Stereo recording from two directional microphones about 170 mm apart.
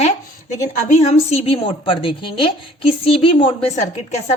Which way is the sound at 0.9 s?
40° left (ahead or behind).